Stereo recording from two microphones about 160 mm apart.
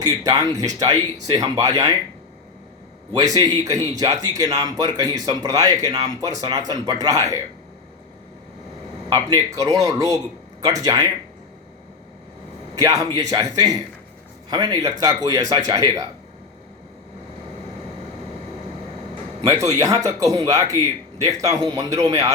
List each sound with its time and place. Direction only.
0.0 s speech: 20° right (ahead or behind)
3.1 s speech: 20° right (ahead or behind)
9.0 s speech: 20° right (ahead or behind)
12.7 s speech: 20° right (ahead or behind)
19.4 s speech: 20° right (ahead or behind)